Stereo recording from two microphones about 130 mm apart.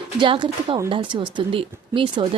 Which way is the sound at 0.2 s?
40° right (ahead or behind).